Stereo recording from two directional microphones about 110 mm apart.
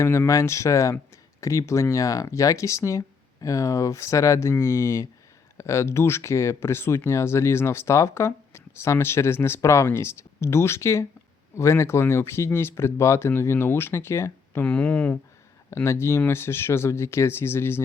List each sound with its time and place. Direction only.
0.0 s speech: 25° left (ahead or behind)
14.6 s speech: 10° left (ahead or behind)
15.7 s speech: 25° left (ahead or behind)